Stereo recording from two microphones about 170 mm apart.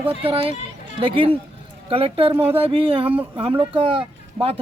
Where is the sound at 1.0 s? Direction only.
30° right (ahead or behind).